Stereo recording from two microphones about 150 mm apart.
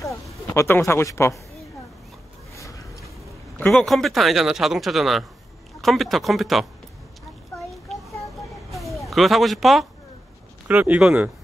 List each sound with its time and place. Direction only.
0.6 s speech: 15° left (ahead or behind)
2.5 s a sound: 20° left (ahead or behind)
3.5 s speech: 5° left (ahead or behind)
7.5 s child singing: centre (ahead or behind)
8.7 s speech: centre (ahead or behind)